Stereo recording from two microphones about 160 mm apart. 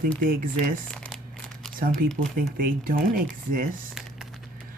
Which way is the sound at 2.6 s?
60° right (ahead or behind).